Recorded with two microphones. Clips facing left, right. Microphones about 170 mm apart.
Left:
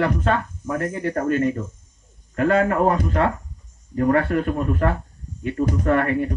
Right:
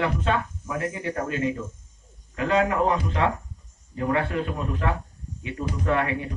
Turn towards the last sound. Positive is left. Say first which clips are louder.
# left 5 dB
turn(degrees=50)  # may be behind; listen again after turning